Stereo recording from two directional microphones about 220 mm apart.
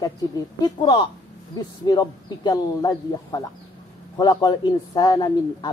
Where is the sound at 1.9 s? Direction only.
20° left (ahead or behind).